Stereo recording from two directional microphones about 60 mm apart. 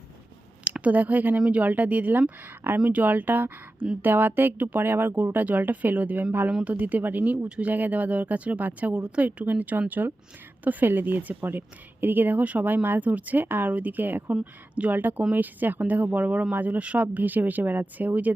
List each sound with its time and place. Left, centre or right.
0.6 s a woman's voice: right
7.3 s speech: centre
7.7 s a woman's voice: right